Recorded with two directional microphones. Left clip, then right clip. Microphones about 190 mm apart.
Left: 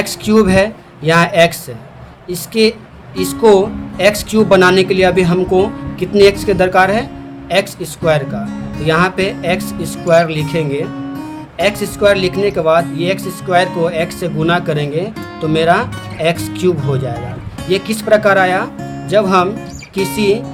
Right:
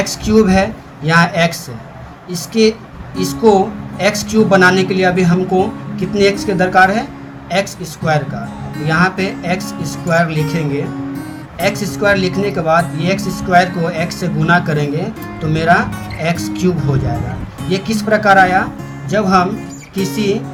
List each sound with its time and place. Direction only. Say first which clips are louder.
0.3 s speech: left 2 dB; 40° left (ahead or behind)
2.5 s speech: even; 35° left (ahead or behind)
8.8 s speech: left 2 dB; 35° left (ahead or behind)